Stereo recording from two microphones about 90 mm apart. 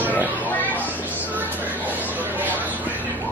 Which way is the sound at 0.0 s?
20° right (ahead or behind).